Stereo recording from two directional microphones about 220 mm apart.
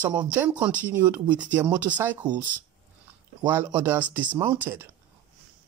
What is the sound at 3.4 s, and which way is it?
Speech, 10° right (ahead or behind).